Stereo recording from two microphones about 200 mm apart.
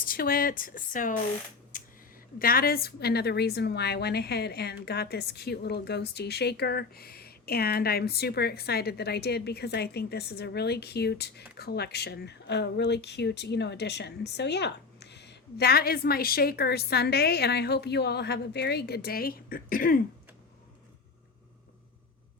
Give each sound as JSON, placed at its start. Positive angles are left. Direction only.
{"t": 0.0, "sound": "a woman's voice", "side_deg": 45}
{"t": 1.7, "sound": "a sound", "side_deg": 40}
{"t": 2.4, "sound": "a woman's voice", "side_deg": 45}